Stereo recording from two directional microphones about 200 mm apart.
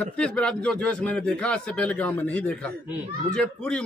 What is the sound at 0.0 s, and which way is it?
A man's voice, 5° left (ahead or behind).